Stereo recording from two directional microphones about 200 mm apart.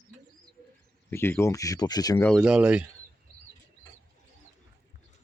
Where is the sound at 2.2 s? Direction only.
Centre (ahead or behind).